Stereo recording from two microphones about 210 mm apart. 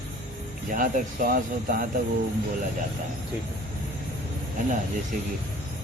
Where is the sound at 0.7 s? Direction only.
40° right (ahead or behind).